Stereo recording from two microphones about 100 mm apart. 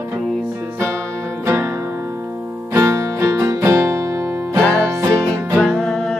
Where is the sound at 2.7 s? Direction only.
25° right (ahead or behind).